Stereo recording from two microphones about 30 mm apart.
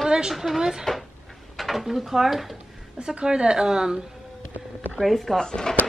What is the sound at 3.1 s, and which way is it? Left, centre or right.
Speech, right.